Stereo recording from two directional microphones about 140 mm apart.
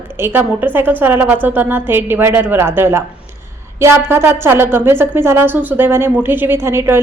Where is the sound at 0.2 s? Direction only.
15° right (ahead or behind).